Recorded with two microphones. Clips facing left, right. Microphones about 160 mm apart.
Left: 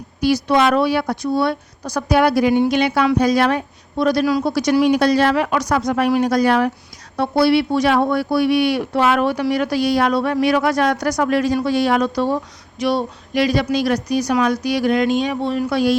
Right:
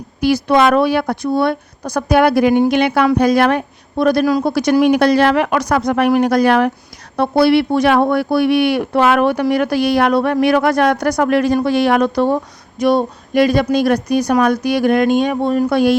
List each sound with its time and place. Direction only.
0.3 s speech: 55° right (ahead or behind)